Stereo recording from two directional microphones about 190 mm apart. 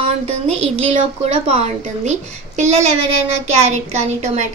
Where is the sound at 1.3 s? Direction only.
35° right (ahead or behind).